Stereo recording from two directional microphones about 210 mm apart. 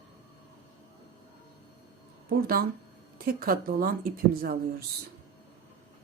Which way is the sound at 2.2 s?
45° right (ahead or behind).